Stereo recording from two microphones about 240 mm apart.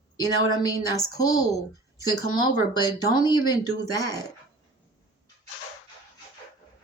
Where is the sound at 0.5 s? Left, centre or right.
Centre.